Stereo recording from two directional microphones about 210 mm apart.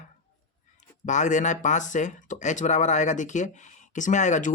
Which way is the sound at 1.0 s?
35° left (ahead or behind).